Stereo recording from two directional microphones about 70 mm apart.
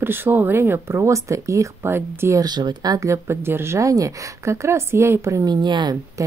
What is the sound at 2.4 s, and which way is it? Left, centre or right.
Speech, right.